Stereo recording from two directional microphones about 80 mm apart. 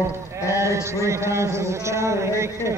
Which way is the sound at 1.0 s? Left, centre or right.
Right.